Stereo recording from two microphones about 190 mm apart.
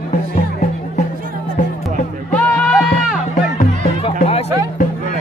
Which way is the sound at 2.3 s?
5° left (ahead or behind).